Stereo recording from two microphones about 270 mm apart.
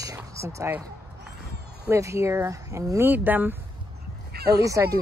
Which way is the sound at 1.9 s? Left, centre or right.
Centre.